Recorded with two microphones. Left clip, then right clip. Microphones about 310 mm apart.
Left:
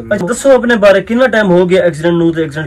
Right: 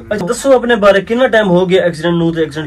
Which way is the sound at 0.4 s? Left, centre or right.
Centre.